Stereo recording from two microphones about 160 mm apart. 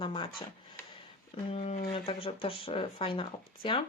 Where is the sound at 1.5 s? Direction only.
40° left (ahead or behind).